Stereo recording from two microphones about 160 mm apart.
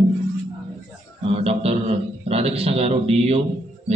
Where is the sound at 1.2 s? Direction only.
40° right (ahead or behind).